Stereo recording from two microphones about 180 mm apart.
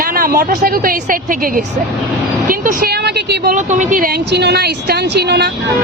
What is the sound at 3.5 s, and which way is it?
Speech, 45° right (ahead or behind).